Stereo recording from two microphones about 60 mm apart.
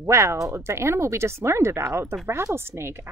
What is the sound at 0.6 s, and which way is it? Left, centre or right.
Speech, right.